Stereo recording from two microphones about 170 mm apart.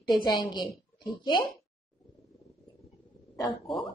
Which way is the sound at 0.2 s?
25° left (ahead or behind).